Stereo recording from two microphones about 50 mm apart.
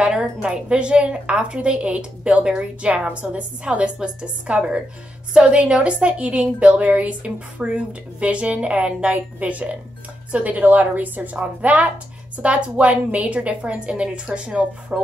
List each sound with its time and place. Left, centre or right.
0.0 s a woman's voice: centre